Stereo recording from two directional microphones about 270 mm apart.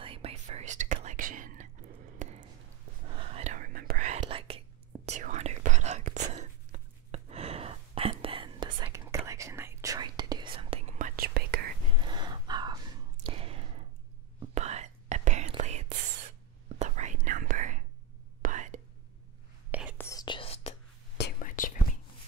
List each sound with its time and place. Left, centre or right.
0.0 s whispering: right
2.2 s a sound: right
3.1 s whispering: right
11.9 s whispering: centre
19.7 s whispering: centre
20.0 s whispering: centre; by 21.7 s left